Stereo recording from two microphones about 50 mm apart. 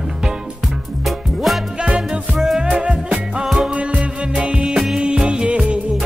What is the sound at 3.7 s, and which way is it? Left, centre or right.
Music, right.